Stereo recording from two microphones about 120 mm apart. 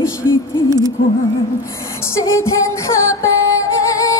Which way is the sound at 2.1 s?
25° left (ahead or behind).